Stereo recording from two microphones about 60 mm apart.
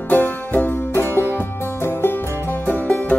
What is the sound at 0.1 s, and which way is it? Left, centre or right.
Music, left.